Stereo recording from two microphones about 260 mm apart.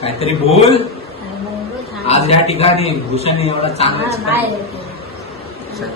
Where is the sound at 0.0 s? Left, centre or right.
Left.